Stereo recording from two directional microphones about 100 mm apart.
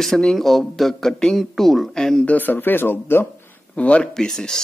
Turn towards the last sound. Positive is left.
turn(degrees=5)  # may be behind; listen again after turning